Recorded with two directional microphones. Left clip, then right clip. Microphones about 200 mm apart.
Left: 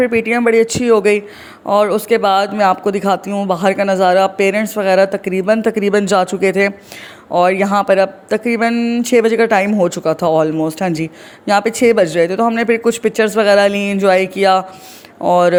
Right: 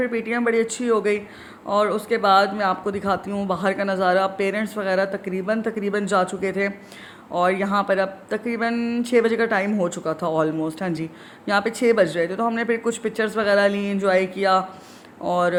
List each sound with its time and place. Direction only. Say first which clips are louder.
0.0 s speech: left 9 dB; 35° left (ahead or behind)